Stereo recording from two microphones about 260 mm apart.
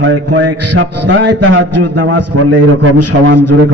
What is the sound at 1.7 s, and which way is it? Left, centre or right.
A man's voice, right.